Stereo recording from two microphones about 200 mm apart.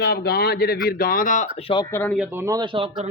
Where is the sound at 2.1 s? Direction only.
10° right (ahead or behind).